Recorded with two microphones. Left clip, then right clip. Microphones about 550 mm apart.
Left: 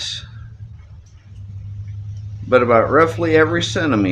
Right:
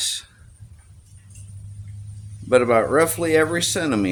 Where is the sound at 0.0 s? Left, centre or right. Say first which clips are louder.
Even; right.